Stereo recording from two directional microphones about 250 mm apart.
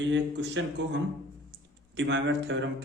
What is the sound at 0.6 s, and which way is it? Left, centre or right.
Speech, right.